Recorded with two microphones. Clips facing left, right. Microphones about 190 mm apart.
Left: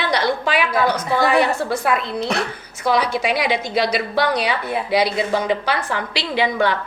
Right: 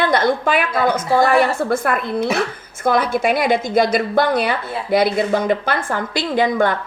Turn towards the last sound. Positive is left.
turn(degrees=-50)  # may be behind; listen again after turning